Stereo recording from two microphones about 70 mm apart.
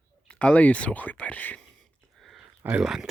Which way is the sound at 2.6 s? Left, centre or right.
Right.